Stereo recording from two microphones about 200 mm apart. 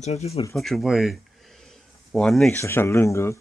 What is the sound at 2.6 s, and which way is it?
Speech, 15° left (ahead or behind).